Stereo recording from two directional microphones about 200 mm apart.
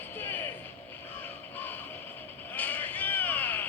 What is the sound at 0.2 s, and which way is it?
Music, 10° left (ahead or behind).